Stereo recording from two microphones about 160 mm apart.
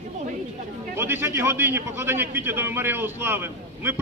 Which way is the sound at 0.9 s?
15° right (ahead or behind).